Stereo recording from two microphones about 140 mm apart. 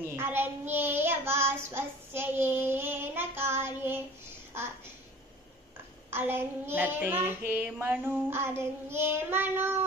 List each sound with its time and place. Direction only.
0.0 s child singing: 15° right (ahead or behind)
6.0 s child singing: 15° right (ahead or behind)